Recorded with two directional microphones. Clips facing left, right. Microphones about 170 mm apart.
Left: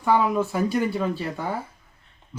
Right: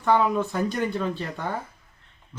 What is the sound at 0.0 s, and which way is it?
Speech, 10° left (ahead or behind).